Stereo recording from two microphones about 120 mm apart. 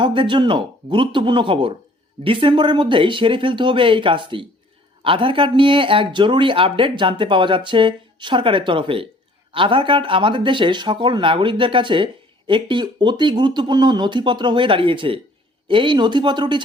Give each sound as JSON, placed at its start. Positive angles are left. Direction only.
{"t": 0.0, "sound": "speech", "side_deg": -45}